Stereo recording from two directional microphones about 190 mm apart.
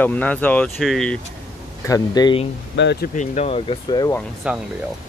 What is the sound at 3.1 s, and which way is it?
Speech, 40° left (ahead or behind).